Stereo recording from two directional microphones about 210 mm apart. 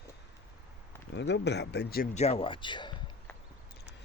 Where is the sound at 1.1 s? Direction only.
55° left (ahead or behind).